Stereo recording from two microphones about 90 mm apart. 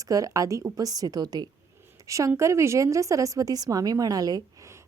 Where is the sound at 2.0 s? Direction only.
35° right (ahead or behind).